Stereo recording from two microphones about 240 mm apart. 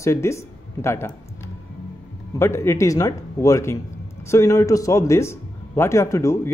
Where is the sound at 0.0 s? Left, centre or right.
Centre.